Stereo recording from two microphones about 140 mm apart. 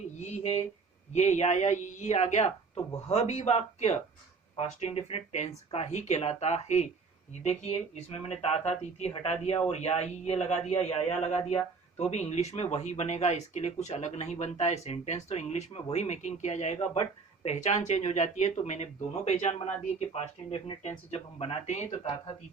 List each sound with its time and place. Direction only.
0.3 s speech: 50° left (ahead or behind)